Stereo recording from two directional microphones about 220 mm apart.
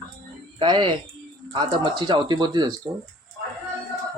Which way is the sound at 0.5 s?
20° right (ahead or behind).